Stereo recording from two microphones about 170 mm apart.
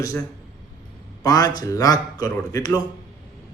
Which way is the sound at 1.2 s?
20° left (ahead or behind).